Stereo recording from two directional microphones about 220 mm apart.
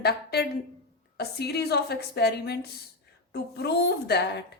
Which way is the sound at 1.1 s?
45° left (ahead or behind).